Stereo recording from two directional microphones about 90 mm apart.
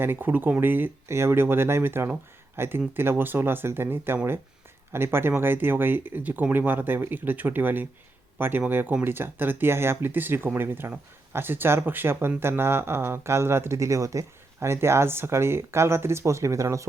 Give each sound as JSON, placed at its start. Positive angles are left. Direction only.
{"t": 0.0, "sound": "speech", "side_deg": -20}